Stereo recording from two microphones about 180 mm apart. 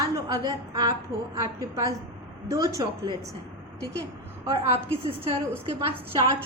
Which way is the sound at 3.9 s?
60° left (ahead or behind).